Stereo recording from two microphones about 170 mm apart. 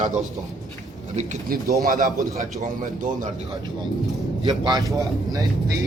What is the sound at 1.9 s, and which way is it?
Speech, 50° right (ahead or behind).